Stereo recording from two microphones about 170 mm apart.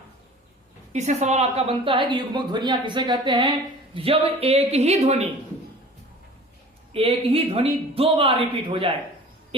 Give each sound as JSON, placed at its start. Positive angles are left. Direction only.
{"t": 0.9, "sound": "a woman's voice", "side_deg": -40}
{"t": 6.9, "sound": "speech", "side_deg": -35}